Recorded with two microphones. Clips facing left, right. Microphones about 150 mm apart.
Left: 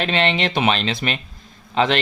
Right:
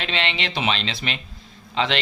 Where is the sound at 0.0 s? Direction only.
45° left (ahead or behind).